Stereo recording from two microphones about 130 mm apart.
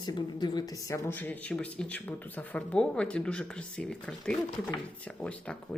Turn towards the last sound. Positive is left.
turn(degrees=10)  # may be behind; listen again after turning